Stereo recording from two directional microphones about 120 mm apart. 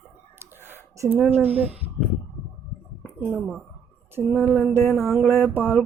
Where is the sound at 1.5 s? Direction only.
60° right (ahead or behind).